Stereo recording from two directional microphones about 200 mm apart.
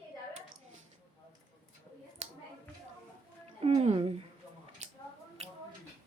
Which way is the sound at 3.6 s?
30° right (ahead or behind).